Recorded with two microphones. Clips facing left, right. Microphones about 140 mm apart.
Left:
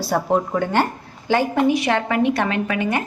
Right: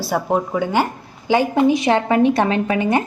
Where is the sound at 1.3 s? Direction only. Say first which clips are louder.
Right 2 dB; 20° right (ahead or behind).